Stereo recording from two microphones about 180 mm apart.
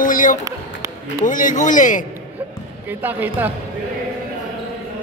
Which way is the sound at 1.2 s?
45° left (ahead or behind).